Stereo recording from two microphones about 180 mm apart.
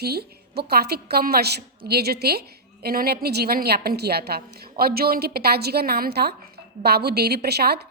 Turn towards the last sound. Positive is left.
turn(degrees=-65)  # may be behind; listen again after turning